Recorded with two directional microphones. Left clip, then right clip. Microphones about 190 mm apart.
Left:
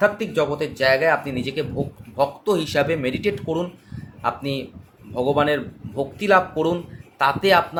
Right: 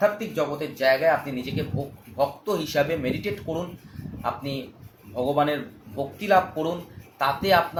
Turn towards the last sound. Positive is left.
turn(degrees=50)  # may be behind; listen again after turning